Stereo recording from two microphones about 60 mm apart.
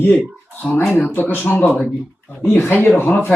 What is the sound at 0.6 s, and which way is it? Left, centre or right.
Speech, centre.